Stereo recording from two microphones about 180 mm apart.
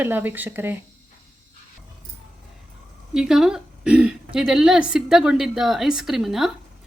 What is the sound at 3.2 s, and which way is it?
A woman's voice, 5° right (ahead or behind).